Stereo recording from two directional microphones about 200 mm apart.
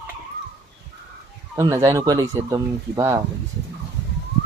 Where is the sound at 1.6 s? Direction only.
15° right (ahead or behind).